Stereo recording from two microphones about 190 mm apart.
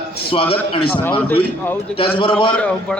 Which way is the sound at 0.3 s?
30° left (ahead or behind).